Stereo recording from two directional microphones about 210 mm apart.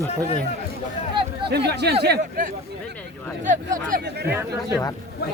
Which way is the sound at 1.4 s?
50° right (ahead or behind).